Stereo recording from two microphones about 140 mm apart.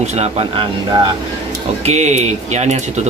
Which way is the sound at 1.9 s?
55° right (ahead or behind).